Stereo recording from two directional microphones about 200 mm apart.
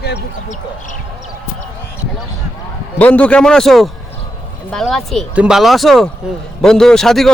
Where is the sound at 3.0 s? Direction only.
10° left (ahead or behind).